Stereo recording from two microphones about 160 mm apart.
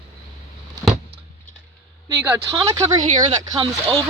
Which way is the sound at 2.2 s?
15° right (ahead or behind).